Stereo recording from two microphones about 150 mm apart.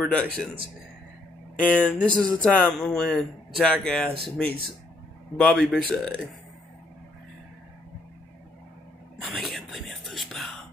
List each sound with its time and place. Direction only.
0.0 s speech: 10° left (ahead or behind)
1.6 s a man's voice: 10° left (ahead or behind)
9.2 s whispering: centre (ahead or behind)